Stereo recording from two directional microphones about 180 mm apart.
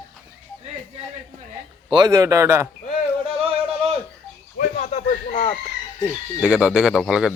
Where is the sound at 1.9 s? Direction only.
20° right (ahead or behind).